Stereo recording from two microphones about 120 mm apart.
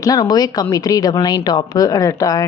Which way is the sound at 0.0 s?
30° left (ahead or behind).